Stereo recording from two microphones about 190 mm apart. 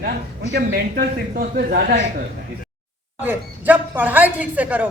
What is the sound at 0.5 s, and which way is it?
A man's voice, 50° right (ahead or behind).